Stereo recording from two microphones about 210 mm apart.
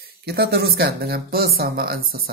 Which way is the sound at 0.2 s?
50° right (ahead or behind).